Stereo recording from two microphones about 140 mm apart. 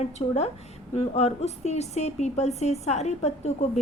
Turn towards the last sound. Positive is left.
turn(degrees=50)  # may be behind; listen again after turning